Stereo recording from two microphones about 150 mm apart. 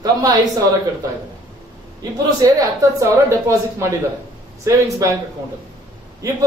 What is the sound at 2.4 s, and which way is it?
Speech, 20° right (ahead or behind).